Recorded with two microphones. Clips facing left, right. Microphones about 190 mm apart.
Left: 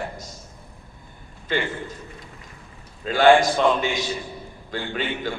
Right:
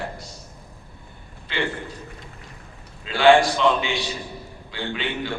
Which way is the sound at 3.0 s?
45° left (ahead or behind).